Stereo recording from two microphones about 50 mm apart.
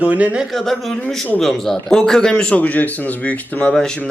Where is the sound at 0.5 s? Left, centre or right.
Centre; by 3.7 s left.